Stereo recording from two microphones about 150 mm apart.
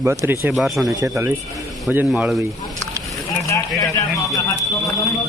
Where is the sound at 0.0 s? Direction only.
15° right (ahead or behind).